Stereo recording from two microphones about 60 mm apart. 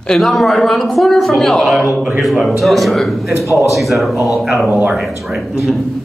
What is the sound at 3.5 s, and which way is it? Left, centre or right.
Speech, left.